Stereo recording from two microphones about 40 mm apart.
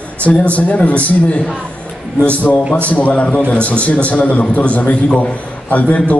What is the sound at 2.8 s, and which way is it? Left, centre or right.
A man's voice, left.